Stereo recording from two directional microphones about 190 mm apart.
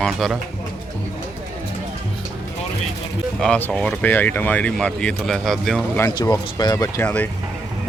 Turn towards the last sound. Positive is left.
turn(degrees=10)  # may be behind; listen again after turning